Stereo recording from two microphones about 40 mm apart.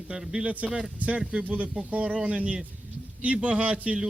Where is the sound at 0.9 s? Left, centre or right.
Right.